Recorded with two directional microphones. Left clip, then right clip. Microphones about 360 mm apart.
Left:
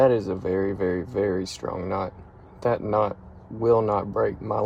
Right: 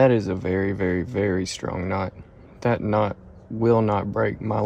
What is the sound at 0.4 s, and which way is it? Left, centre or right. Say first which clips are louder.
Speech: even; right.